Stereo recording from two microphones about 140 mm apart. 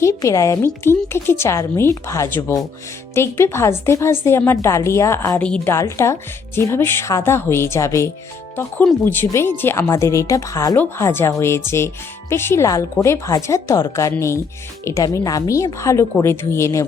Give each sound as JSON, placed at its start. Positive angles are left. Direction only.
{"t": 0.0, "sound": "a woman's voice", "side_deg": 20}
{"t": 5.4, "sound": "speech", "side_deg": 10}
{"t": 5.7, "sound": "a woman's voice", "side_deg": 20}
{"t": 8.5, "sound": "a woman's voice", "side_deg": 10}